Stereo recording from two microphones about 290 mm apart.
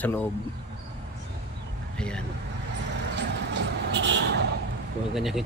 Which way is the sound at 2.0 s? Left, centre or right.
Centre.